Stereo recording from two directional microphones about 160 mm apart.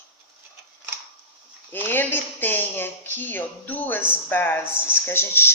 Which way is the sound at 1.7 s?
10° left (ahead or behind).